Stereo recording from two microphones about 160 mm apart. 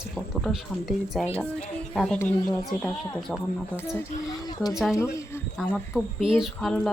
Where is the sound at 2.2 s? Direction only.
20° left (ahead or behind).